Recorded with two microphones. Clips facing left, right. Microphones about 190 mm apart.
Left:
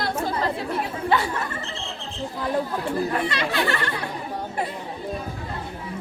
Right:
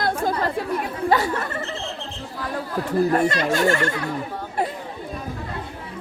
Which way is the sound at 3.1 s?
45° right (ahead or behind).